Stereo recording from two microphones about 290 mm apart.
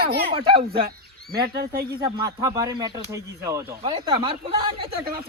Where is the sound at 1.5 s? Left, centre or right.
Right.